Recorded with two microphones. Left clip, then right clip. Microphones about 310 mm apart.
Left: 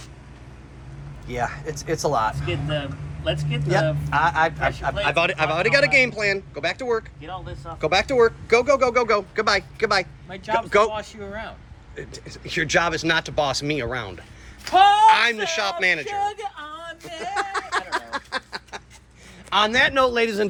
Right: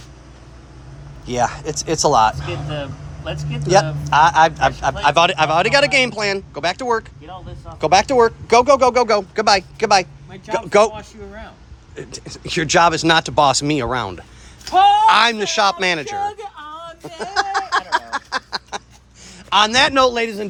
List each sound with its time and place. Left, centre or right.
1.3 s speech: centre
14.7 s a sound: centre
19.5 s a man's voice: centre
19.9 s a man's voice: right
20.1 s a man's voice: centre